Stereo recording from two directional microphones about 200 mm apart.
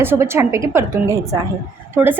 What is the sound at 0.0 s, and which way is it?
A woman's voice, 10° right (ahead or behind).